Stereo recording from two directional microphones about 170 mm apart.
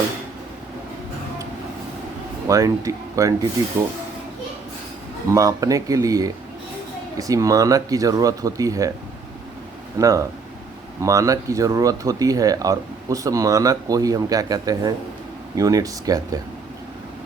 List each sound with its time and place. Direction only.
2.5 s speech: 20° right (ahead or behind)
5.3 s speech: 20° right (ahead or behind)
10.0 s speech: 20° right (ahead or behind)